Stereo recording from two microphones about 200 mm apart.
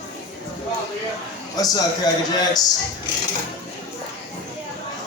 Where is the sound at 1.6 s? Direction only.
20° left (ahead or behind).